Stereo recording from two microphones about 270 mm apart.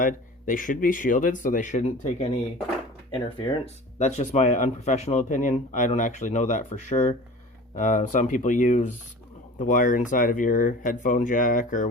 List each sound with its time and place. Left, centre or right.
0.0 s speech: left